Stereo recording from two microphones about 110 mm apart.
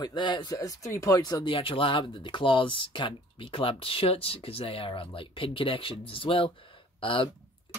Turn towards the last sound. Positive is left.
turn(degrees=50)  # may be behind; listen again after turning